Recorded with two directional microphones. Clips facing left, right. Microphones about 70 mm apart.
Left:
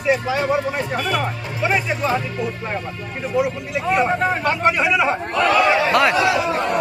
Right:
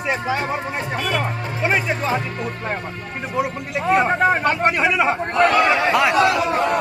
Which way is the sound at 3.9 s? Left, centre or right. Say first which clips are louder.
Right 2 dB; right.